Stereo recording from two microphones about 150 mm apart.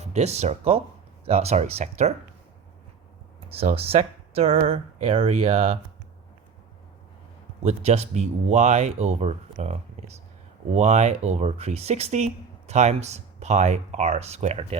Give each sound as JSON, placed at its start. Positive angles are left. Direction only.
{"t": 0.0, "sound": "speech", "side_deg": -45}
{"t": 3.5, "sound": "speech", "side_deg": -40}
{"t": 7.6, "sound": "speech", "side_deg": -45}
{"t": 10.8, "sound": "speech", "side_deg": -50}